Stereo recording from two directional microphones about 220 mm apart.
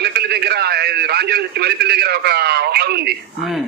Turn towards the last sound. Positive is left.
turn(degrees=0)  # may be behind; listen again after turning